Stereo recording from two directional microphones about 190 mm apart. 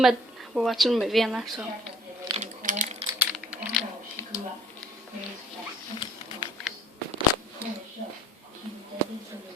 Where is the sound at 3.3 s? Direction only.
Centre (ahead or behind).